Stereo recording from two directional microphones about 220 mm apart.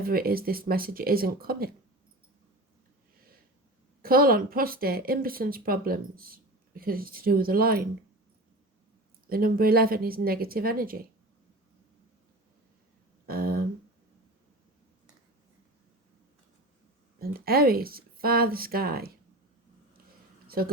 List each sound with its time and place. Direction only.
0.0 s speech: 40° right (ahead or behind)
4.0 s speech: 40° right (ahead or behind)
9.2 s speech: 40° right (ahead or behind)
13.2 s a sound: 40° right (ahead or behind)
17.2 s speech: 45° right (ahead or behind)
20.6 s speech: 40° right (ahead or behind)